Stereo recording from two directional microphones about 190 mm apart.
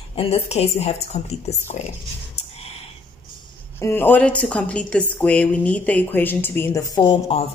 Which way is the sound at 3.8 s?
10° left (ahead or behind).